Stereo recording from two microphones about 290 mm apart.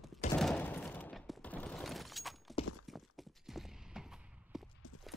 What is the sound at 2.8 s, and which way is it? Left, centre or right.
Clip-clop, centre.